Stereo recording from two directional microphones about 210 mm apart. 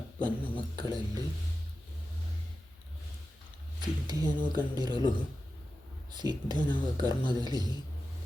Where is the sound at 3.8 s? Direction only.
20° right (ahead or behind).